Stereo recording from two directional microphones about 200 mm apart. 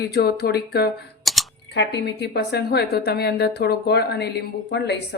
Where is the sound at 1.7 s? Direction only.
60° left (ahead or behind).